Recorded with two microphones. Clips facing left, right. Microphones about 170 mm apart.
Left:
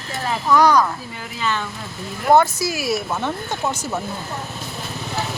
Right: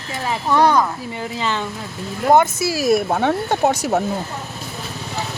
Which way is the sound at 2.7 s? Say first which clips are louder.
Right 9 dB; 50° right (ahead or behind).